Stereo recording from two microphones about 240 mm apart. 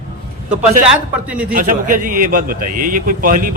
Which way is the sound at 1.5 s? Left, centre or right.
Right.